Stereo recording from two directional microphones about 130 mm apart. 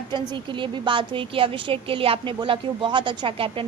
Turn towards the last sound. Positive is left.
turn(degrees=-40)  # may be behind; listen again after turning